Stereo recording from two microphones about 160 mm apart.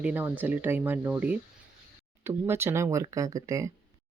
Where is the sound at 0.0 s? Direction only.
10° right (ahead or behind).